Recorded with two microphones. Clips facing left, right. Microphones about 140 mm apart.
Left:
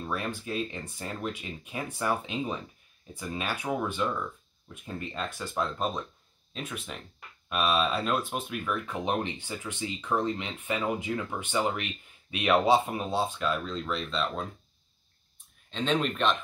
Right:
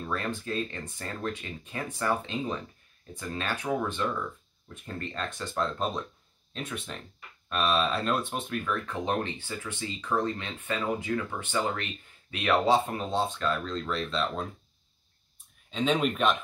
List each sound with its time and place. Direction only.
0.0 s speech: 10° left (ahead or behind)
15.7 s speech: 5° right (ahead or behind)